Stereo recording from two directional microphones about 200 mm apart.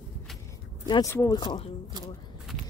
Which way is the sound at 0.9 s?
15° left (ahead or behind).